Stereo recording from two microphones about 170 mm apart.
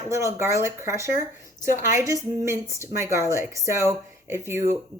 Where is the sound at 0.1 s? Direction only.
15° right (ahead or behind).